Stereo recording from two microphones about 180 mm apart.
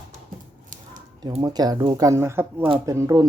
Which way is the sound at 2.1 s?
15° right (ahead or behind).